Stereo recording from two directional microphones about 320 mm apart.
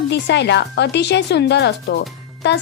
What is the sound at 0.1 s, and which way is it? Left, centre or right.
Speech, left.